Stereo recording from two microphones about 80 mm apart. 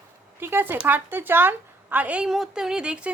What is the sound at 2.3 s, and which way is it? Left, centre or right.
Speech, centre.